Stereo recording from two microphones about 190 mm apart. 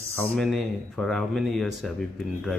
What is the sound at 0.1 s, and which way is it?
Speech, 5° left (ahead or behind).